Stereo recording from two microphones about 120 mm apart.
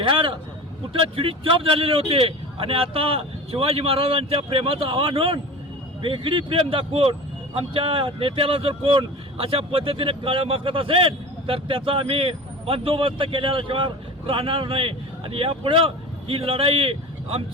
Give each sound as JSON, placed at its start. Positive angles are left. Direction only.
{"t": 0.0, "sound": "a man's voice", "side_deg": -45}